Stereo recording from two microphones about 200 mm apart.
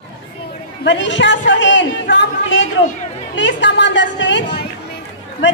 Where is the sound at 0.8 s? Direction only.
65° left (ahead or behind).